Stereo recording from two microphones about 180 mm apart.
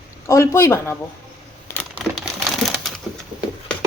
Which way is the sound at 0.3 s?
15° left (ahead or behind).